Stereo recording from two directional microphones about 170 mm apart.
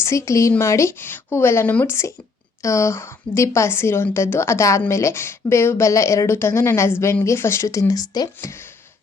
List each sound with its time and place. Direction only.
0.0 s a woman's voice: 15° left (ahead or behind)